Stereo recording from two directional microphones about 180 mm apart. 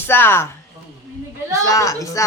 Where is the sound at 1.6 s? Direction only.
15° left (ahead or behind).